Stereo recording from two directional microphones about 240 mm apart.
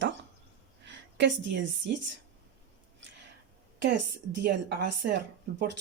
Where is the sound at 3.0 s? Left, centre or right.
Right.